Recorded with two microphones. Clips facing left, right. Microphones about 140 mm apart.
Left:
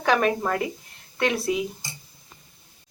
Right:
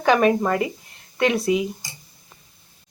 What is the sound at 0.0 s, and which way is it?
A woman's voice, centre (ahead or behind).